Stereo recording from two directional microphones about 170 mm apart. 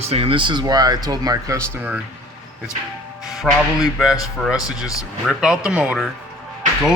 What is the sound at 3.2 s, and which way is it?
Speech, centre (ahead or behind).